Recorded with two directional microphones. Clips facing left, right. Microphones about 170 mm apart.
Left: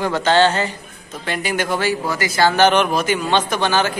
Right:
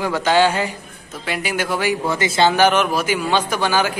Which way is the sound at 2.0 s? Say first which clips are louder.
Right 1 dB; 25° right (ahead or behind).